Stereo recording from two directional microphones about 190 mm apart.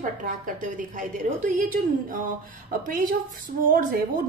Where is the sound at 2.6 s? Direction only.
45° right (ahead or behind).